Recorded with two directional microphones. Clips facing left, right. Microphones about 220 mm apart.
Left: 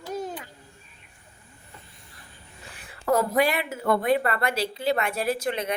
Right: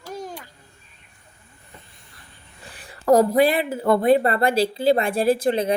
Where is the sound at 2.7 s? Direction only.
35° right (ahead or behind).